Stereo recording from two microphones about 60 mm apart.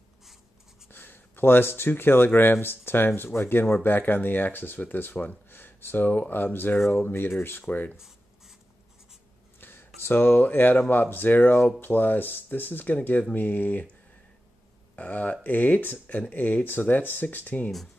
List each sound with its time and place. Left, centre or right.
0.8 s speech: left
7.9 s writing: centre
9.6 s a sound: left
10.0 s speech: left
15.0 s speech: left